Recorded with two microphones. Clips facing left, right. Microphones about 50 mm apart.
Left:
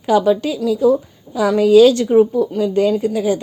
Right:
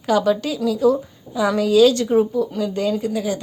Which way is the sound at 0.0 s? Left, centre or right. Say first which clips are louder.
Left 4 dB; centre.